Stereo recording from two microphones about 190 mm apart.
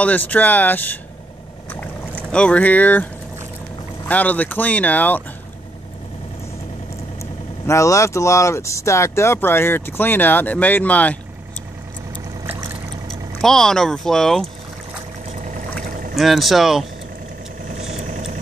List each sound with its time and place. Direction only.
0.0 s speech: 10° left (ahead or behind)
2.3 s speech: 5° left (ahead or behind)
4.1 s speech: 10° left (ahead or behind)
7.6 s speech: 15° left (ahead or behind)
13.4 s speech: centre (ahead or behind)
16.2 s speech: centre (ahead or behind)
17.9 s vehicle: 35° right (ahead or behind)